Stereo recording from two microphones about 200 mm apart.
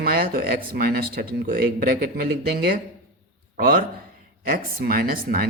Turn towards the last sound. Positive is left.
turn(degrees=-50)  # may be behind; listen again after turning